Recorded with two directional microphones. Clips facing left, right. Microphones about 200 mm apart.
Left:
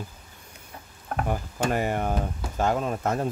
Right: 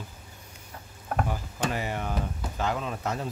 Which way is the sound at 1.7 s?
50° left (ahead or behind).